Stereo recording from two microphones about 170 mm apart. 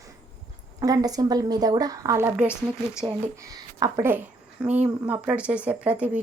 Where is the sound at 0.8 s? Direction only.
20° right (ahead or behind).